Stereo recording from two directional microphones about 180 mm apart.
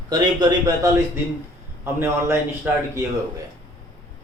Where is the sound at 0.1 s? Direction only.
20° right (ahead or behind).